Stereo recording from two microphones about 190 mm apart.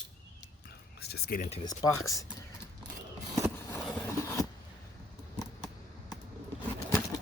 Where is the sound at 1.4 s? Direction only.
35° left (ahead or behind).